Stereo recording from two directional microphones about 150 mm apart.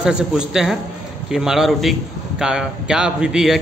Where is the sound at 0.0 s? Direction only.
5° right (ahead or behind).